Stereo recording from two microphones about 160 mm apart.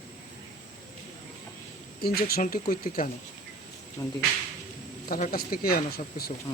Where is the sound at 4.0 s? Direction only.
25° left (ahead or behind).